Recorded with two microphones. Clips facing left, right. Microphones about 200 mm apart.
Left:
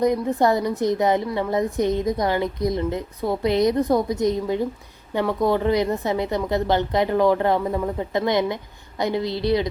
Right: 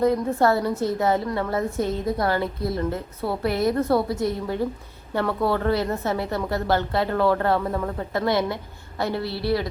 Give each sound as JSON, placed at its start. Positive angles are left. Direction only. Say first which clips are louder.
{"t": 0.0, "sound": "a woman's voice", "louder": "left 1 dB", "side_deg": 15}